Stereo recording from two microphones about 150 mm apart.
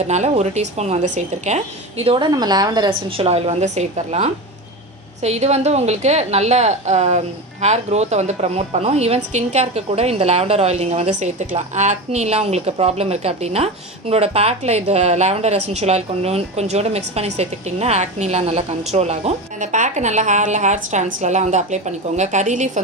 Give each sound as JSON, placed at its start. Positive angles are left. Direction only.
{"t": 0.0, "sound": "a woman's voice", "side_deg": -50}
{"t": 2.3, "sound": "a woman's voice", "side_deg": -25}